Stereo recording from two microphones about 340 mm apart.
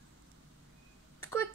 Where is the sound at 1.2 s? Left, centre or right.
Centre.